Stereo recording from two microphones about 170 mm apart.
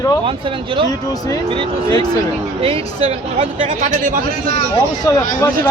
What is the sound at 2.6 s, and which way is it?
Speech, 35° right (ahead or behind).